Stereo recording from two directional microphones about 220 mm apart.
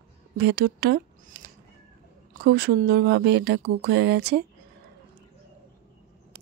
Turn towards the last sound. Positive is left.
turn(degrees=-50)  # may be behind; listen again after turning